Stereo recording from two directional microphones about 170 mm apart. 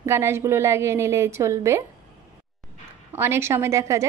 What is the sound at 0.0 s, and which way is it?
A woman's voice, 15° right (ahead or behind).